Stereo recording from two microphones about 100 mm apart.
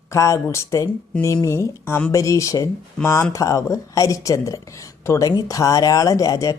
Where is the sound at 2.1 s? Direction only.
35° left (ahead or behind).